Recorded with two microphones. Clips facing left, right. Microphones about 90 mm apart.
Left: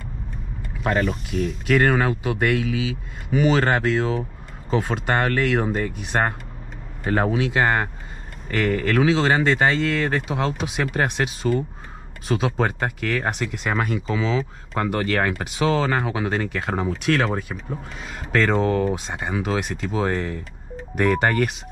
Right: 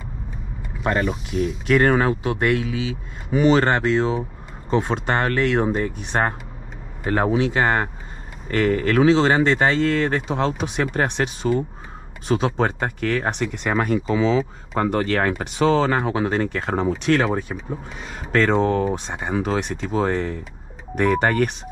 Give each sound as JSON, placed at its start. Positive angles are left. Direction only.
{"t": 0.6, "sound": "speech", "side_deg": 0}
{"t": 7.3, "sound": "speech", "side_deg": 0}
{"t": 14.1, "sound": "speech", "side_deg": -35}
{"t": 14.4, "sound": "speech", "side_deg": 0}